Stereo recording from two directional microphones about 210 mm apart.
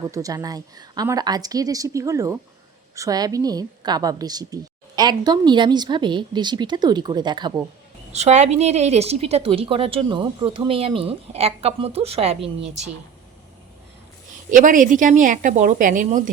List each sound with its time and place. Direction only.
0.1 s a woman's voice: 15° right (ahead or behind)
8.1 s a woman's voice: 30° right (ahead or behind)
14.5 s a woman's voice: 40° right (ahead or behind)